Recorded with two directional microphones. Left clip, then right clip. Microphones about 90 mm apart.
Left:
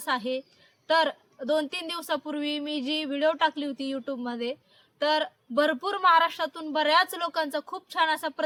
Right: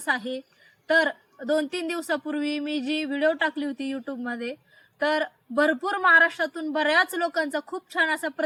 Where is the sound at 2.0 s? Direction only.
30° left (ahead or behind).